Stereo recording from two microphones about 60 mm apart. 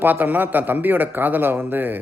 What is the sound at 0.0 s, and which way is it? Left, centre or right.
A man's voice, right.